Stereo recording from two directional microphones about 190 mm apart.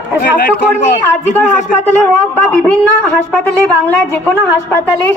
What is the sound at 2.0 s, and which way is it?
Speech, 15° left (ahead or behind).